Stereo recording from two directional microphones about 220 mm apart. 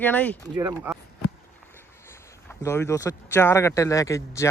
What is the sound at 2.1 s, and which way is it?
Speech, 10° left (ahead or behind).